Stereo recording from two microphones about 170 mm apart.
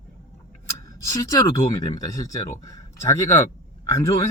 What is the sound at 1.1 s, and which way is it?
Speech, 20° left (ahead or behind).